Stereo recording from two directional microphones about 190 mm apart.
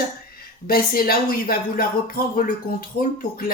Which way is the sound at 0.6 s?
50° left (ahead or behind).